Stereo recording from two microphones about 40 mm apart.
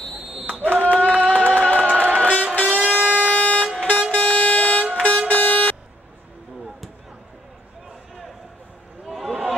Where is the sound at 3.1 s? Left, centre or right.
Left.